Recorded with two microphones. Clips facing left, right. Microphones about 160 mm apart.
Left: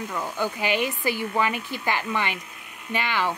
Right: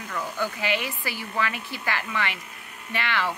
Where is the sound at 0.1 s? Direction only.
15° left (ahead or behind).